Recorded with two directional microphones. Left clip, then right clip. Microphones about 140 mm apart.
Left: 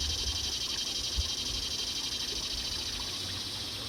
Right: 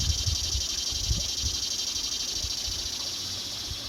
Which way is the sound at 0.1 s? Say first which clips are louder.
Right 3 dB; 60° right (ahead or behind).